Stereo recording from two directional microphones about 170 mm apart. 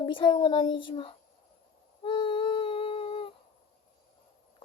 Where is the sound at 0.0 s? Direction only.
30° left (ahead or behind).